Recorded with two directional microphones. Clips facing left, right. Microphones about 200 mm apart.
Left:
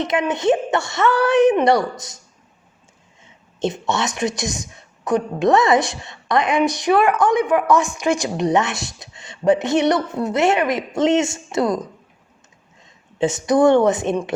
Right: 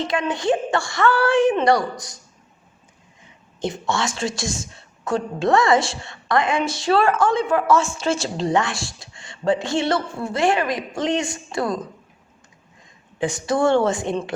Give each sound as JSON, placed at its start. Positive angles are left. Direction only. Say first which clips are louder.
{"t": 0.0, "sound": "a woman's voice", "louder": "left 3 dB", "side_deg": 20}
{"t": 3.6, "sound": "a woman's voice", "louder": "left 2 dB", "side_deg": 20}
{"t": 13.1, "sound": "a woman's voice", "louder": "left 5 dB", "side_deg": 20}